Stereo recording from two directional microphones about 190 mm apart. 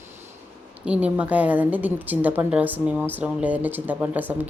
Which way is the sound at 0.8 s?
5° right (ahead or behind).